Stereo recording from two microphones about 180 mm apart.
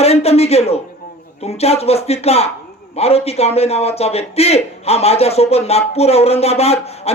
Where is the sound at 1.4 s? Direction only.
35° left (ahead or behind).